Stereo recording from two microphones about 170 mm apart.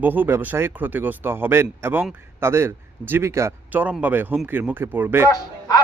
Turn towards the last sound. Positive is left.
turn(degrees=20)  # may be behind; listen again after turning